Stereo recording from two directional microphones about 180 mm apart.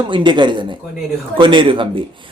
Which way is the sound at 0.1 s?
25° right (ahead or behind).